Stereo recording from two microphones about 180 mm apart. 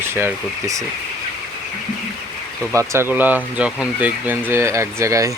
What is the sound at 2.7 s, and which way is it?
Speech, 15° right (ahead or behind).